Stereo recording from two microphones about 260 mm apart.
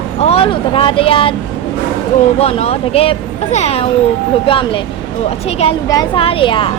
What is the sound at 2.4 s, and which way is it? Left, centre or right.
Speech, left.